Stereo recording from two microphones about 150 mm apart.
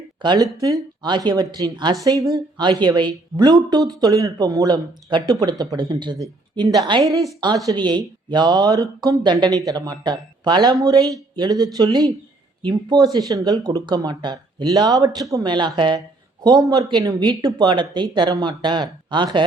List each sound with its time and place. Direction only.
0.2 s a woman's voice: 30° right (ahead or behind)